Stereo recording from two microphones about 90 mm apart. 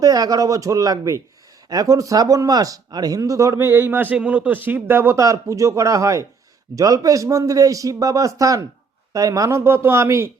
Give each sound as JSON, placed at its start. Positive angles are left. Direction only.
{"t": 0.0, "sound": "a man's voice", "side_deg": -45}
{"t": 5.2, "sound": "speech", "side_deg": -35}